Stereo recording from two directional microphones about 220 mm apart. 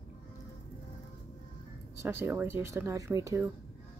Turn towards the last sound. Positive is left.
turn(degrees=-15)  # may be behind; listen again after turning